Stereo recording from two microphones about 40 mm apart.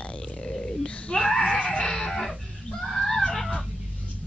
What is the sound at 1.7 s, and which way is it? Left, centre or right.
Music, centre.